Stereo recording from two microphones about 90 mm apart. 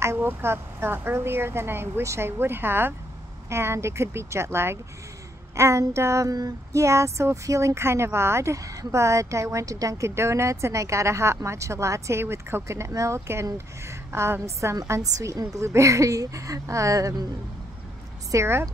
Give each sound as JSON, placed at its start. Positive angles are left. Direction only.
{"t": 0.0, "sound": "speech", "side_deg": -25}
{"t": 5.6, "sound": "child singing", "side_deg": -30}
{"t": 18.3, "sound": "speech", "side_deg": -30}